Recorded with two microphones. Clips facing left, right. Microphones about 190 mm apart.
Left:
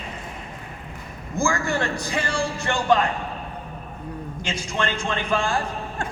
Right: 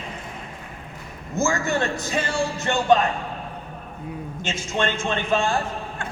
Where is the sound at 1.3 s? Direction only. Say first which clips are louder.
Right 1 dB; 20° right (ahead or behind).